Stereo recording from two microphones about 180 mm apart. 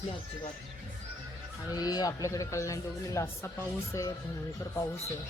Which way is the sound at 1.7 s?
20° left (ahead or behind).